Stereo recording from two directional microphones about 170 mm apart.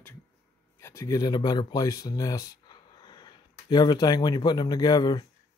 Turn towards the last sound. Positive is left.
turn(degrees=25)  # may be behind; listen again after turning